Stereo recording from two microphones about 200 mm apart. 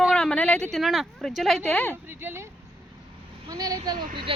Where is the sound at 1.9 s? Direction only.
10° right (ahead or behind).